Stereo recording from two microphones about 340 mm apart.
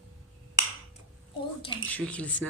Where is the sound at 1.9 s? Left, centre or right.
Centre.